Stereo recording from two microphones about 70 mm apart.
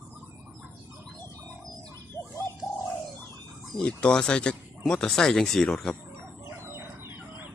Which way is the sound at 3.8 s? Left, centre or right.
Centre.